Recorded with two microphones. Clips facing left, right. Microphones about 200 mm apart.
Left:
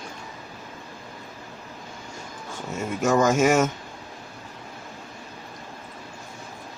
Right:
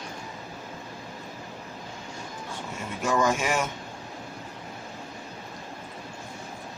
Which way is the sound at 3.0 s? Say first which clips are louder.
Left 6 dB; 45° left (ahead or behind).